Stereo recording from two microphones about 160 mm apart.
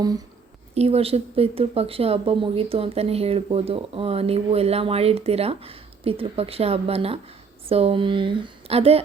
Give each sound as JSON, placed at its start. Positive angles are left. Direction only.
{"t": 0.7, "sound": "a woman's voice", "side_deg": -40}